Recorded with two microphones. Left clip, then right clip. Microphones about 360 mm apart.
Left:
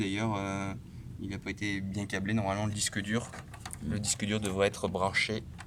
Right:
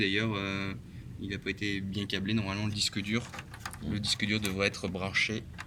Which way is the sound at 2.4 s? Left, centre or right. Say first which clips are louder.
Even; centre.